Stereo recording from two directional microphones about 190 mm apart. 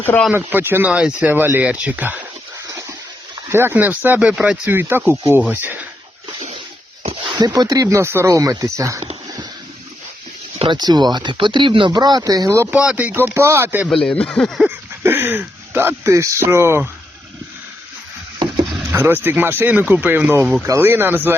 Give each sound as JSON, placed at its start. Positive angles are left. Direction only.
{"t": 0.3, "sound": "speech", "side_deg": -10}
{"t": 3.5, "sound": "speech", "side_deg": -10}
{"t": 7.3, "sound": "speech", "side_deg": -20}
{"t": 10.6, "sound": "speech", "side_deg": -25}
{"t": 13.9, "sound": "speech", "side_deg": 5}
{"t": 15.0, "sound": "speech", "side_deg": -10}
{"t": 18.9, "sound": "speech", "side_deg": -10}